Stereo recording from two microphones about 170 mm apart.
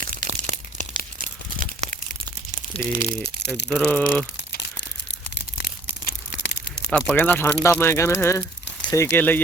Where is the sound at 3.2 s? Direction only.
80° left.